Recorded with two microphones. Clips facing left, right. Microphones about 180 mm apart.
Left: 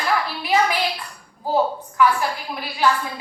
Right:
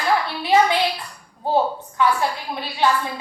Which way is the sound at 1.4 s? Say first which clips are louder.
Even; 25° right (ahead or behind).